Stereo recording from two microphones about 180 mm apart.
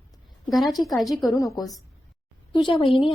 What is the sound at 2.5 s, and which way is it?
Speech, 25° left (ahead or behind).